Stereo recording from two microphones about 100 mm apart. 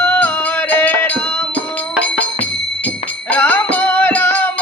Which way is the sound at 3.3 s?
20° left (ahead or behind).